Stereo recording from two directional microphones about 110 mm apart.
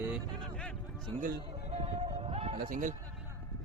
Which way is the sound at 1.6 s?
80° right.